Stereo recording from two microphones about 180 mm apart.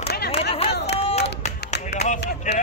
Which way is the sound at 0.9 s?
35° left (ahead or behind).